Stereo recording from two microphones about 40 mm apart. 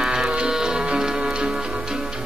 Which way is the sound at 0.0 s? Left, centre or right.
Centre.